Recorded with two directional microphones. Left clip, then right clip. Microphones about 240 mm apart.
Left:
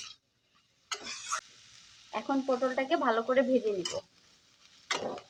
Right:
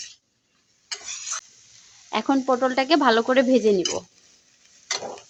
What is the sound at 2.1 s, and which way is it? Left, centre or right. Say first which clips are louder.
Speech: right 9 dB; right.